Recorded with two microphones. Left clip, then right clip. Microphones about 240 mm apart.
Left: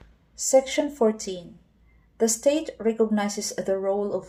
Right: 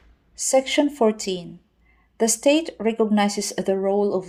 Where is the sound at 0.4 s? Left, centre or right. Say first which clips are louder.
Right 2 dB; right.